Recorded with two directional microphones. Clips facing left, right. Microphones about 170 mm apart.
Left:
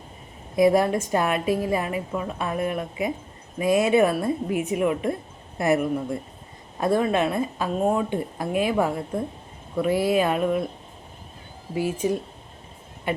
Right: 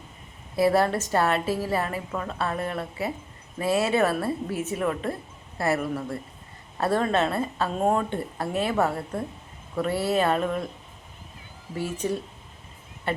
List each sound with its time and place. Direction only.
0.5 s speech: 15° left (ahead or behind)
11.7 s speech: 10° left (ahead or behind)